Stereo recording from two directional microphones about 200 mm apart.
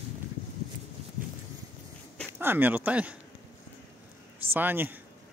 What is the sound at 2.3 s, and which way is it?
Speech, 10° right (ahead or behind).